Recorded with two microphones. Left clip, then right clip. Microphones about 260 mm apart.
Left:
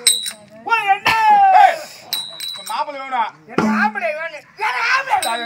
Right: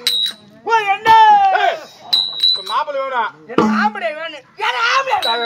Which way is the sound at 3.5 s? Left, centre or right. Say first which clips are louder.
Right 4 dB; centre.